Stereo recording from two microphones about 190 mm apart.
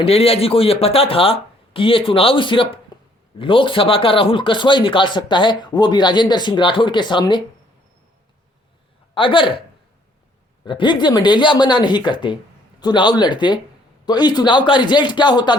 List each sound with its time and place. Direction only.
0.0 s speech: 30° left (ahead or behind)
9.1 s speech: 25° left (ahead or behind)
10.7 s speech: 25° left (ahead or behind)